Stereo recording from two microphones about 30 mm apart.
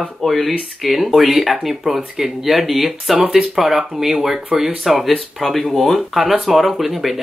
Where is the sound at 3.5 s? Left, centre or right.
Centre.